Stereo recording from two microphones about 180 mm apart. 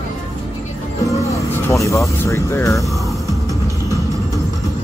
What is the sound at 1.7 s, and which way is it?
Speech, 15° left (ahead or behind).